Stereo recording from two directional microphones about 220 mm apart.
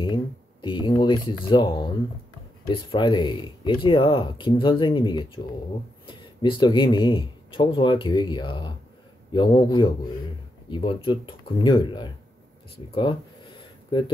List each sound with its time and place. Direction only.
0.0 s speech: 20° left (ahead or behind)